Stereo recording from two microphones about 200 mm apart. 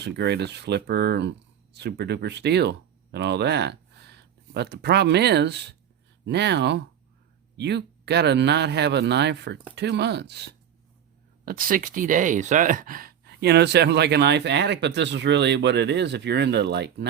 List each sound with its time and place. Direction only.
0.0 s speech: 55° right (ahead or behind)
11.4 s speech: 45° right (ahead or behind)